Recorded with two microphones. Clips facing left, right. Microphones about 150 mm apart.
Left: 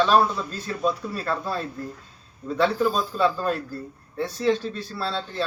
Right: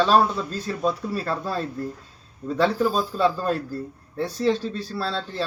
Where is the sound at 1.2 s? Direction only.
35° right (ahead or behind).